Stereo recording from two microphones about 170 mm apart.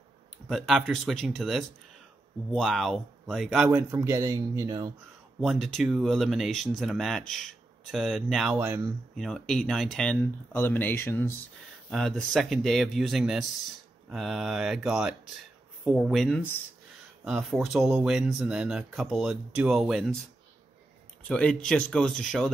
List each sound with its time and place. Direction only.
0.5 s speech: centre (ahead or behind)
3.7 s speech: 15° right (ahead or behind)
5.4 s speech: centre (ahead or behind)
8.5 s speech: 15° right (ahead or behind)
9.1 s speech: centre (ahead or behind)
11.9 s speech: 5° left (ahead or behind)
17.2 s speech: centre (ahead or behind)
21.3 s speech: 5° left (ahead or behind)